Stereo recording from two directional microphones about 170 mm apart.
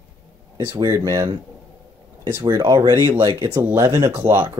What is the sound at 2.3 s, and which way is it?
Speech, 20° right (ahead or behind).